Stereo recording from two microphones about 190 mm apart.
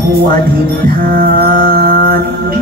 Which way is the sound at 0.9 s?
50° right (ahead or behind).